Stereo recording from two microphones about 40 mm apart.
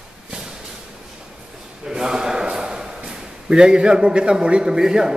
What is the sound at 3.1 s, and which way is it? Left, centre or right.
A man's voice, centre.